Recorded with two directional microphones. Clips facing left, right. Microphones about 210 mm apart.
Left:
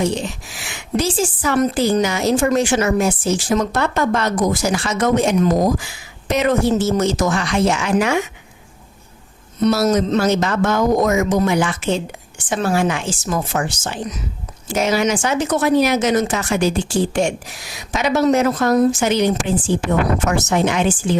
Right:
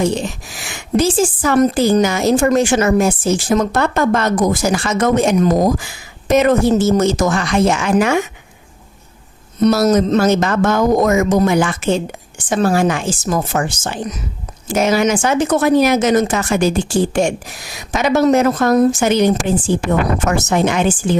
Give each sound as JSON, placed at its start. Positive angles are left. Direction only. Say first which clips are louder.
{"t": 0.5, "sound": "a woman's voice", "louder": "right 5 dB", "side_deg": -45}
{"t": 9.6, "sound": "a woman's voice", "louder": "right 3 dB", "side_deg": -40}